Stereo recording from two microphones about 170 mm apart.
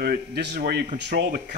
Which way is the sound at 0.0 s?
70° right (ahead or behind).